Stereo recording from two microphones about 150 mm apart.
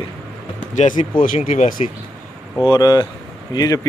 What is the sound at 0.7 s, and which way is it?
Speech, 55° left (ahead or behind).